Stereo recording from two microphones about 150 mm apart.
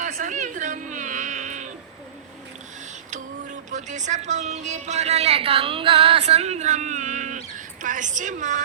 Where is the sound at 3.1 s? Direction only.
55° right (ahead or behind).